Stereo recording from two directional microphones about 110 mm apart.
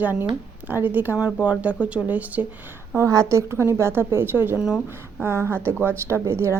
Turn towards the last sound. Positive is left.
turn(degrees=-25)  # may be behind; listen again after turning